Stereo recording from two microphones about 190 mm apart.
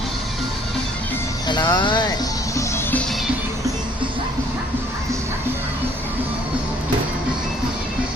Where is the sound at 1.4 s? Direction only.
25° left (ahead or behind); by 3.3 s centre (ahead or behind).